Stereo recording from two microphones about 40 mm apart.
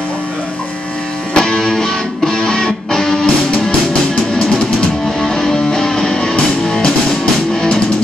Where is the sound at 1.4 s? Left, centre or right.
Centre.